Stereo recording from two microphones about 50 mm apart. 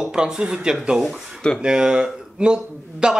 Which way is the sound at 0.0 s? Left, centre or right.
Centre.